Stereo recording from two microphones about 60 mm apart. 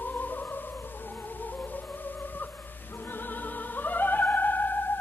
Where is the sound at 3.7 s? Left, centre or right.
Left.